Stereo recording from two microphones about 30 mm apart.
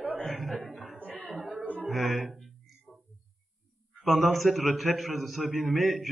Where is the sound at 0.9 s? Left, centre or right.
Right.